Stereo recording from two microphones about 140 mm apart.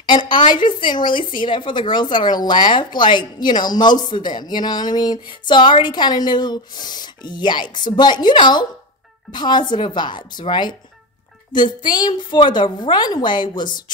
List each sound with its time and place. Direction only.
0.0 s a woman's voice: 35° left (ahead or behind)